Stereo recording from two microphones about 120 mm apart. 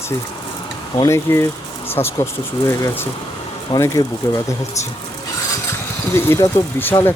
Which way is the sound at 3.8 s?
25° left (ahead or behind).